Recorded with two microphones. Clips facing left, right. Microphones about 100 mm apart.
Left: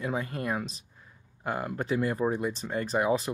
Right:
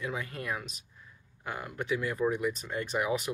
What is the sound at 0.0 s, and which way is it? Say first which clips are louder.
Speech: left 5 dB; 35° left (ahead or behind).